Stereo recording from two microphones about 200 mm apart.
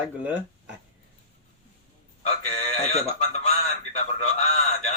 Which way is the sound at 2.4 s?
35° left (ahead or behind).